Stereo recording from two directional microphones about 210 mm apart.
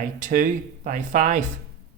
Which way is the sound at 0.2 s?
40° right (ahead or behind).